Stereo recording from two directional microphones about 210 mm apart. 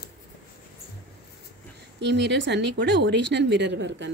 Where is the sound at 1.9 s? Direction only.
55° right (ahead or behind).